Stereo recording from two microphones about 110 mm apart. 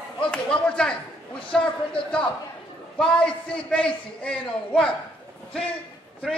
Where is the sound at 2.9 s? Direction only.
10° left (ahead or behind).